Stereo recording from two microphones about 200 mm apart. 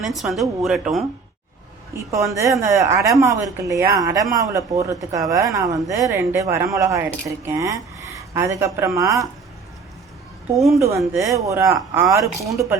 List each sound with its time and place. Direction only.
0.0 s speech: centre (ahead or behind)
2.0 s a woman's voice: 15° right (ahead or behind)
10.8 s a woman's voice: 15° right (ahead or behind)
12.2 s speech: centre (ahead or behind)